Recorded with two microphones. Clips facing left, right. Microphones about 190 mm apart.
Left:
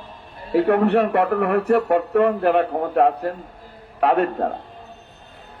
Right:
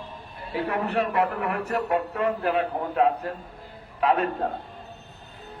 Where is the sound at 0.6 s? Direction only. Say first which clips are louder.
Left 8 dB; 65° left (ahead or behind).